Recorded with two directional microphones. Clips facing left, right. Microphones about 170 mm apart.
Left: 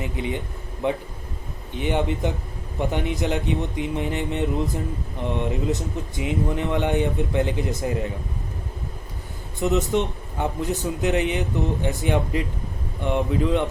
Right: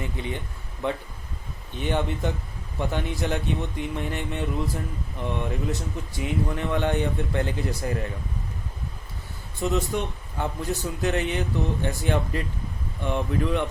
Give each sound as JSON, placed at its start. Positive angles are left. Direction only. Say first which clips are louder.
{"t": 0.0, "sound": "a man's voice", "louder": "left 4 dB", "side_deg": 15}
{"t": 9.6, "sound": "a man's voice", "louder": "left 4 dB", "side_deg": 20}